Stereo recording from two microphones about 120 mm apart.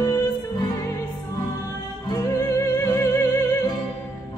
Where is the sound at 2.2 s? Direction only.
25° left (ahead or behind).